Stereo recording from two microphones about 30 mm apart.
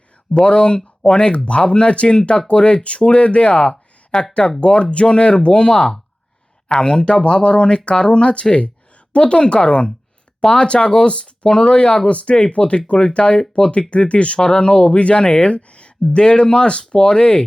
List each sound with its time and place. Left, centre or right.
0.3 s speech: left
14.3 s speech: left